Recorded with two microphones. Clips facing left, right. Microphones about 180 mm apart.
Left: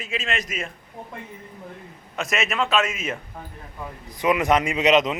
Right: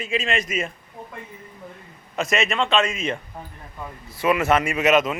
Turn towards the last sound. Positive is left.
turn(degrees=20)  # may be behind; listen again after turning